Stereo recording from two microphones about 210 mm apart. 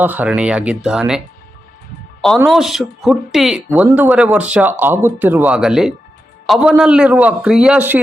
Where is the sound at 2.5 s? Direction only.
Centre (ahead or behind).